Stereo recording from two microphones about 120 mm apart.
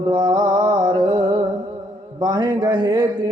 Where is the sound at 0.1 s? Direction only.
35° right (ahead or behind).